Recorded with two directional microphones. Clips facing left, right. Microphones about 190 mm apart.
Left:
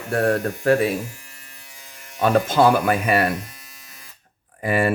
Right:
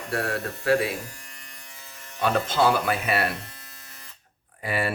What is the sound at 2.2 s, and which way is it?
Speech, 50° left (ahead or behind).